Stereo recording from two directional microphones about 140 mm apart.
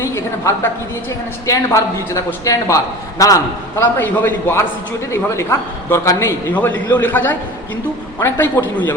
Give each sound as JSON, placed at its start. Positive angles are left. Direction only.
{"t": 0.0, "sound": "a woman's voice", "side_deg": 20}